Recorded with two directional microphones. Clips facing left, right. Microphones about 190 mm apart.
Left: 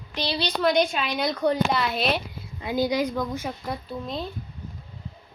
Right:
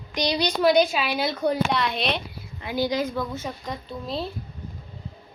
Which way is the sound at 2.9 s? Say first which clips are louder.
Left 1 dB; 15° left (ahead or behind).